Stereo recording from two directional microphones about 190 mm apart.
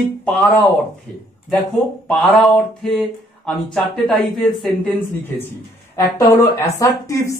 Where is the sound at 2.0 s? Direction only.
Centre (ahead or behind).